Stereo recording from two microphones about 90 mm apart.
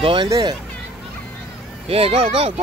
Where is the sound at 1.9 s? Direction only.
90° right.